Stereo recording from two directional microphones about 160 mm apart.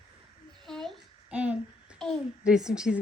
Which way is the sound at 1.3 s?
10° right (ahead or behind).